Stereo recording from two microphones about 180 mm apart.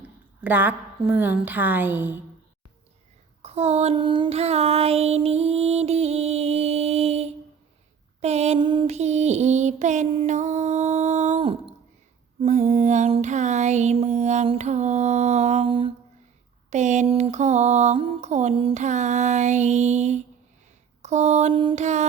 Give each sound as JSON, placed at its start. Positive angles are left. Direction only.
{"t": 0.4, "sound": "a woman's voice", "side_deg": -10}
{"t": 3.4, "sound": "child singing", "side_deg": -35}
{"t": 12.4, "sound": "mantra", "side_deg": -40}
{"t": 16.6, "sound": "child singing", "side_deg": -40}